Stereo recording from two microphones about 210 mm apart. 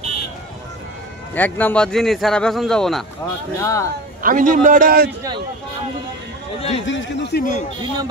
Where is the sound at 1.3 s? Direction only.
10° left (ahead or behind).